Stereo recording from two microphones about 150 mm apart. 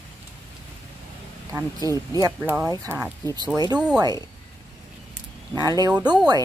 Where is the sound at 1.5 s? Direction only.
20° right (ahead or behind).